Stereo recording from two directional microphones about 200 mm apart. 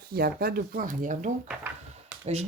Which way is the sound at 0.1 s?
50° right (ahead or behind).